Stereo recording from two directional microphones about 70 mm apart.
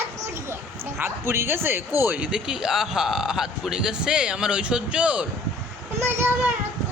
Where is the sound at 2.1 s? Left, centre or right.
Centre.